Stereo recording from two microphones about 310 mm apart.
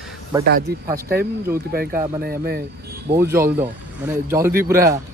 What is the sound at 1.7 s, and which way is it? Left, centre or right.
Speech, right.